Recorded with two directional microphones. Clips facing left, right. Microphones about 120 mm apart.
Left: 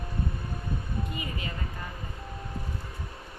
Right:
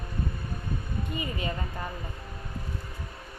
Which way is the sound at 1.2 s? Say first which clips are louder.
Right 4 dB; 30° right (ahead or behind).